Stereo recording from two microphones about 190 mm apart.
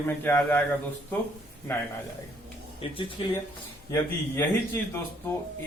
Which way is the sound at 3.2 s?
25° left (ahead or behind).